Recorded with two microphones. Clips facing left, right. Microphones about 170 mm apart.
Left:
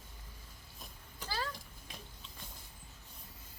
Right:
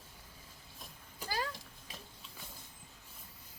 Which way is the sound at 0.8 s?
10° right (ahead or behind).